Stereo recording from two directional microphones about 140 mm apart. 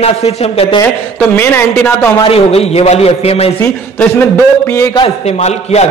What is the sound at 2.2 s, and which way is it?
A man's voice, 45° left (ahead or behind).